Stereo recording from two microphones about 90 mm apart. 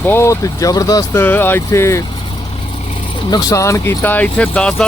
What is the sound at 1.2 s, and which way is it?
Speech, 20° left (ahead or behind).